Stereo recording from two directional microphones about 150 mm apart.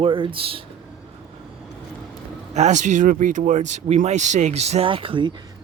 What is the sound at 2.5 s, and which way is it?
Speech, 50° right (ahead or behind).